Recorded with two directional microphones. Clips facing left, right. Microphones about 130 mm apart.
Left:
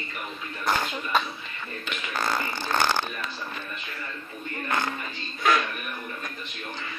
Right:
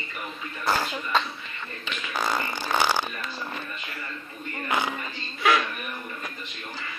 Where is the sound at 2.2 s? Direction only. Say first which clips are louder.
Right 1 dB; 10° right (ahead or behind).